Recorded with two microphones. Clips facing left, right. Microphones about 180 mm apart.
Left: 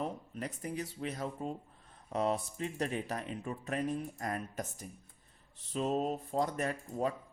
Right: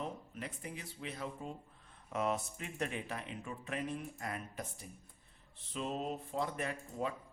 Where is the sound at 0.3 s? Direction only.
40° left (ahead or behind).